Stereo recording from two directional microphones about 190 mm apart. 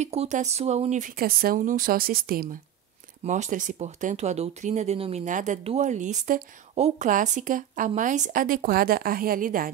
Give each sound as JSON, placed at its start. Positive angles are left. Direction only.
{"t": 0.0, "sound": "speech", "side_deg": -35}
{"t": 3.3, "sound": "speech", "side_deg": -40}